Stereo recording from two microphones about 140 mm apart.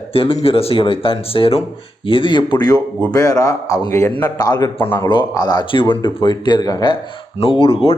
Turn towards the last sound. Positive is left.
turn(degrees=40)  # may be behind; listen again after turning